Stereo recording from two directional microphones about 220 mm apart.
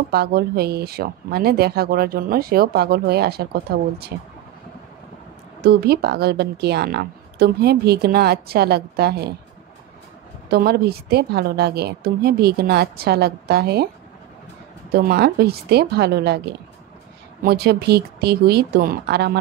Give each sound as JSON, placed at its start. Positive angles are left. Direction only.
{"t": 0.1, "sound": "speech", "side_deg": -45}
{"t": 5.7, "sound": "speech", "side_deg": -45}
{"t": 10.5, "sound": "speech", "side_deg": -45}
{"t": 14.9, "sound": "speech", "side_deg": -45}
{"t": 17.4, "sound": "speech", "side_deg": -45}